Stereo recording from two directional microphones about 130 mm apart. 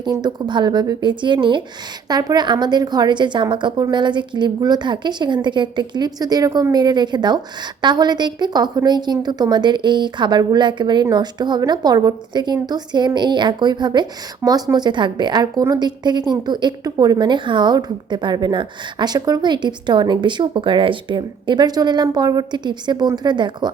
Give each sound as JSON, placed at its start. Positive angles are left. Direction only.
{"t": 0.0, "sound": "a woman's voice", "side_deg": -35}